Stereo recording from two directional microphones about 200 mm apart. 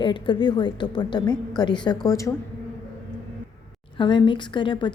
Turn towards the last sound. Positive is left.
turn(degrees=25)  # may be behind; listen again after turning